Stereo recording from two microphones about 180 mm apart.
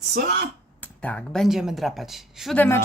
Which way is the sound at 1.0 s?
5° left (ahead or behind).